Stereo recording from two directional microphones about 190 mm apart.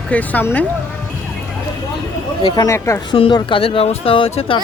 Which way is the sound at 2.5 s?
15° left (ahead or behind).